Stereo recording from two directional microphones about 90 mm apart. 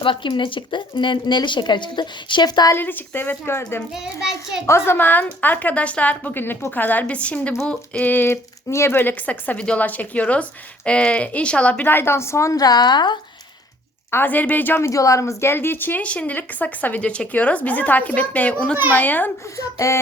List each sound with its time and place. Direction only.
0.0 s speech: 70° left (ahead or behind); by 2.7 s 55° left (ahead or behind)
2.7 s speech: 20° left (ahead or behind)
3.9 s a child's voice: 5° right (ahead or behind)
4.9 s speech: 20° left (ahead or behind); by 13.1 s 55° left (ahead or behind)
14.1 s speech: 20° left (ahead or behind)
19.5 s speech: 35° left (ahead or behind)